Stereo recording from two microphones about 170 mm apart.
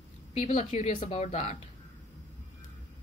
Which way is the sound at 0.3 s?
40° left (ahead or behind).